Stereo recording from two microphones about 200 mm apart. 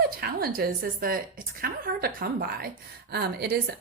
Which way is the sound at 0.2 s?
50° right (ahead or behind).